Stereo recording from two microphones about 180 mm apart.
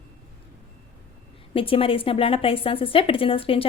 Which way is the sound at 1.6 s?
30° left (ahead or behind).